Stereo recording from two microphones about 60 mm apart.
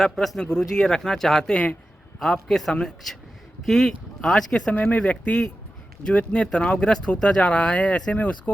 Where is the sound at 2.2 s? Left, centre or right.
Centre.